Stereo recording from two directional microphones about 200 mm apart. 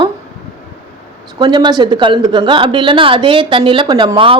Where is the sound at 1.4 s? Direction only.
20° right (ahead or behind).